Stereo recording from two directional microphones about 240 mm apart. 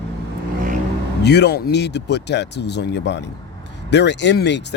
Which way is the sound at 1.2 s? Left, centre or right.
Left.